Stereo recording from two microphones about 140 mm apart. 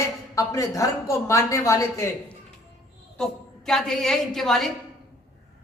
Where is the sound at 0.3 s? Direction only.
25° left (ahead or behind).